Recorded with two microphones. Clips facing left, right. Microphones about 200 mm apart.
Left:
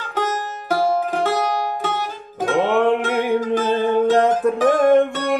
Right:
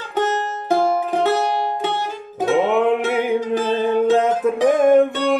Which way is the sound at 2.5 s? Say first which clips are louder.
Even; 5° right (ahead or behind).